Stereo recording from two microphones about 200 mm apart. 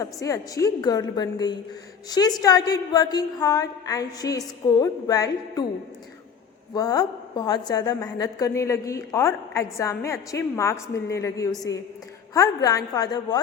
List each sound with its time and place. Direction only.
0.0 s a woman's voice: 15° left (ahead or behind)
6.7 s a woman's voice: 15° left (ahead or behind)